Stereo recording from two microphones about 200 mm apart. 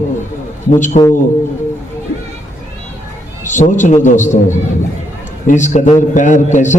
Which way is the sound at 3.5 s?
40° left (ahead or behind).